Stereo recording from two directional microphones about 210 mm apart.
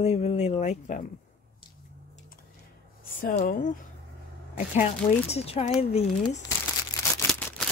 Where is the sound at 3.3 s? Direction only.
40° left (ahead or behind).